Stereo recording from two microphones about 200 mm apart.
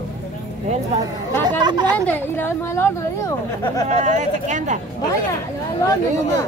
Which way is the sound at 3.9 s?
35° right (ahead or behind).